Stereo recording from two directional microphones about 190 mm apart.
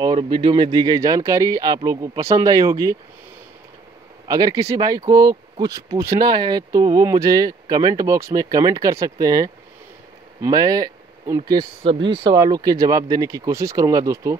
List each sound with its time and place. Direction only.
0.0 s speech: 25° right (ahead or behind)
4.3 s speech: 20° right (ahead or behind)
12.0 s speech: 70° right (ahead or behind)
12.3 s speech: 20° right (ahead or behind)